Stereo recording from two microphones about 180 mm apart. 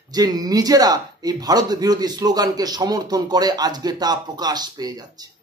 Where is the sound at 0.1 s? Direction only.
20° right (ahead or behind).